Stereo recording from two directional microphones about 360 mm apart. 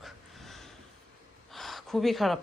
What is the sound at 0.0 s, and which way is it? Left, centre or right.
Snort, centre.